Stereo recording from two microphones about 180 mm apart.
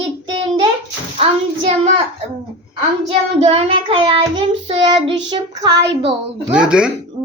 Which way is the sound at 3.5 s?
35° right (ahead or behind).